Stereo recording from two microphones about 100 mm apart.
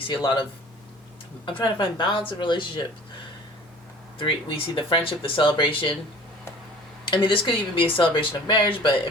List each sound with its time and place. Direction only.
0.0 s speech: 50° left (ahead or behind)
1.5 s speech: 55° left (ahead or behind)
4.2 s speech: 60° left (ahead or behind)
7.1 s speech: 60° left (ahead or behind)